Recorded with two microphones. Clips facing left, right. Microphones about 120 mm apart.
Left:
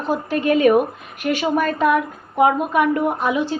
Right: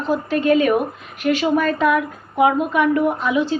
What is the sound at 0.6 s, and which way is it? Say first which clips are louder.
A woman's voice: left 2 dB; 50° left (ahead or behind).